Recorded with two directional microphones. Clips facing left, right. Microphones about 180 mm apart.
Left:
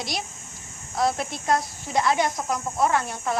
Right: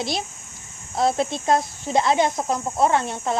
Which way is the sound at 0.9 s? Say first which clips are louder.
Right 4 dB; 25° right (ahead or behind).